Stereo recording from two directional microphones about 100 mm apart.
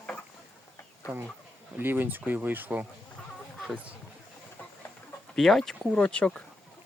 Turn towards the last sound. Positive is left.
turn(degrees=10)  # may be behind; listen again after turning